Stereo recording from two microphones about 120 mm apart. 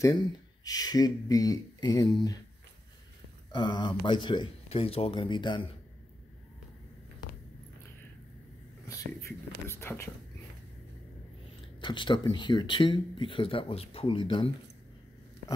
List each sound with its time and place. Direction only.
0.7 s speech: 30° left (ahead or behind)
3.5 s speech: 40° left (ahead or behind)
4.6 s speech: 55° left (ahead or behind)
8.8 s whispering: 25° left (ahead or behind)
11.8 s speech: 40° left (ahead or behind)